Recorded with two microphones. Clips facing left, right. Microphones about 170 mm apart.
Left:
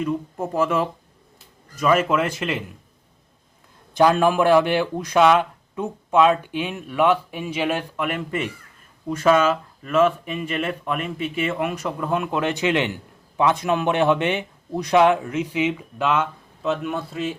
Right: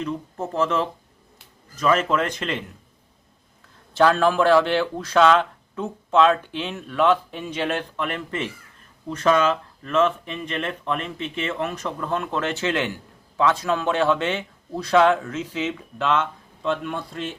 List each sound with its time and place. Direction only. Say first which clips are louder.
0.0 s a man's voice: left 3 dB; 10° left (ahead or behind)
3.9 s a man's voice: left 1 dB; 15° left (ahead or behind)